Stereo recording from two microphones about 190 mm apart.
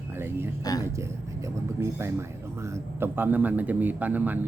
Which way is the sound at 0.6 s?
20° left (ahead or behind).